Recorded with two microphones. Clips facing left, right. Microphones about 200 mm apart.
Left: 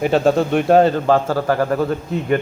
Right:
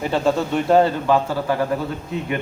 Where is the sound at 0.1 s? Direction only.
60° left (ahead or behind).